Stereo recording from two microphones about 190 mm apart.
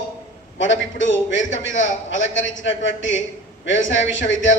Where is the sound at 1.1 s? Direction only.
80° left.